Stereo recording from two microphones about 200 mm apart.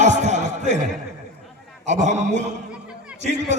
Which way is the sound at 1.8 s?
35° right (ahead or behind).